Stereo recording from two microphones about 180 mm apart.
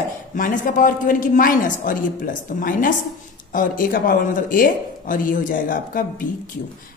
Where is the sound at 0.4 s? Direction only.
50° left (ahead or behind).